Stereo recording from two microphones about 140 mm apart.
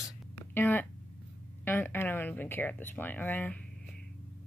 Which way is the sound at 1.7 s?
15° left (ahead or behind).